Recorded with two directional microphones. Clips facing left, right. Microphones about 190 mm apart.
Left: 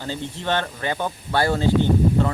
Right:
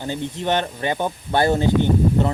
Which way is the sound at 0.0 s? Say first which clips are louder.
Right 3 dB; 15° right (ahead or behind).